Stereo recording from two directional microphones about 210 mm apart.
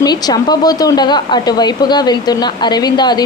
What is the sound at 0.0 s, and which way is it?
Speech, 20° left (ahead or behind).